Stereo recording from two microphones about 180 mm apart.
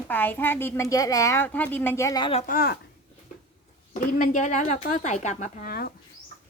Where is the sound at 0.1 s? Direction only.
10° left (ahead or behind).